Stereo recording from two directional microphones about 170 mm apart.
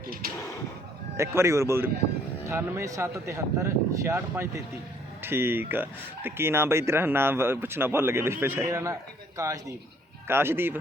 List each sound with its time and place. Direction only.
1.1 s speech: 15° right (ahead or behind)